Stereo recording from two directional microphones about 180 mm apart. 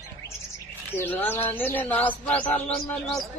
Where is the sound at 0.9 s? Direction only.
10° left (ahead or behind).